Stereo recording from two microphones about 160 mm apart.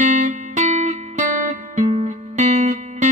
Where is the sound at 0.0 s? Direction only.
50° right (ahead or behind).